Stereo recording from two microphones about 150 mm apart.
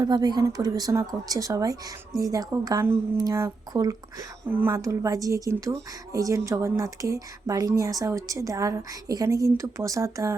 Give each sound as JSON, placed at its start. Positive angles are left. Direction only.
{"t": 0.0, "sound": "speech", "side_deg": -25}